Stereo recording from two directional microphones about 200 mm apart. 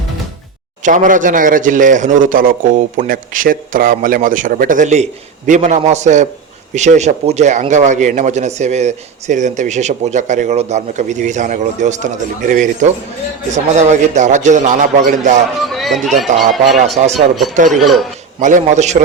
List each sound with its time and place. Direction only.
0.8 s a man's voice: 40° right (ahead or behind)
15.7 s speech: centre (ahead or behind)
16.7 s a man's voice: 35° right (ahead or behind)
17.7 s speech: centre (ahead or behind)
18.3 s a man's voice: 40° right (ahead or behind)